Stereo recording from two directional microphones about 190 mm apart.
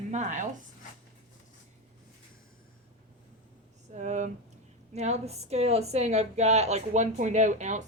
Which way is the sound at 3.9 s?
40° right (ahead or behind).